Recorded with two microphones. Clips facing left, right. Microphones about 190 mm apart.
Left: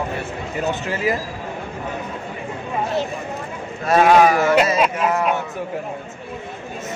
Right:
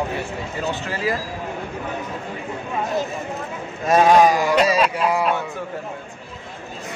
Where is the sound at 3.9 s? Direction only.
15° right (ahead or behind).